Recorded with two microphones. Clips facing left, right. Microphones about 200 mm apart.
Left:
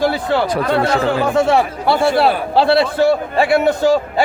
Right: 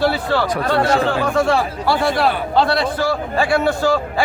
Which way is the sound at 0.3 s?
20° left (ahead or behind).